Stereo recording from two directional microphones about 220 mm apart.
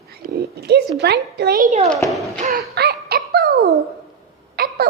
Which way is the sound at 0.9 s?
50° right (ahead or behind).